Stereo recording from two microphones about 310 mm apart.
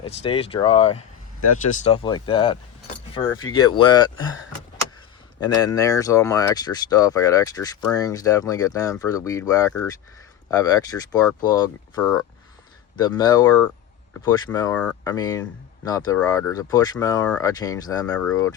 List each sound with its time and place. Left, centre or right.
0.0 s speech: centre
5.4 s speech: centre